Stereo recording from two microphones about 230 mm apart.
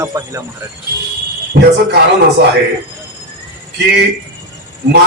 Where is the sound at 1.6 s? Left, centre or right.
Right.